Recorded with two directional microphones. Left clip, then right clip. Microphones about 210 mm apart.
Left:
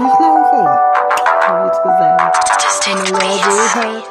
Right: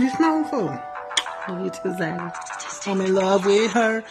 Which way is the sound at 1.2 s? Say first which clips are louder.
Left 18 dB; 30° left (ahead or behind).